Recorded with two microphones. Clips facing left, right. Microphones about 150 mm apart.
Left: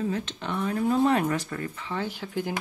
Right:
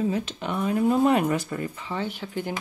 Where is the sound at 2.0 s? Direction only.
Centre (ahead or behind).